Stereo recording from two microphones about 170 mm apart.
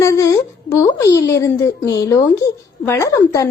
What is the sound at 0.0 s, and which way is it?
A woman's voice, 20° left (ahead or behind).